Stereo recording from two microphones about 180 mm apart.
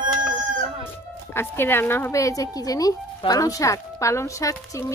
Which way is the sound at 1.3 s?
10° left (ahead or behind).